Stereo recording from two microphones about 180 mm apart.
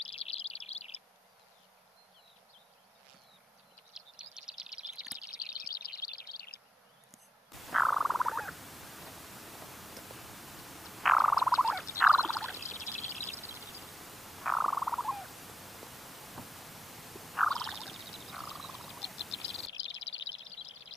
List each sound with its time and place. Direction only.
0.1 s chirp: 35° left (ahead or behind)
3.9 s owl: 5° right (ahead or behind)
4.7 s a sound: centre (ahead or behind)
5.6 s chirp: 55° left (ahead or behind)
7.5 s purr: centre (ahead or behind)
12.0 s frog: centre (ahead or behind)
12.7 s a sound: centre (ahead or behind)
13.6 s frog: centre (ahead or behind)
19.7 s bird: 90° left